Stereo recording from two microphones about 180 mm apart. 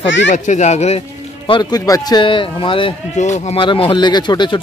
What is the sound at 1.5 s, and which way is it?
Speech, 20° left (ahead or behind).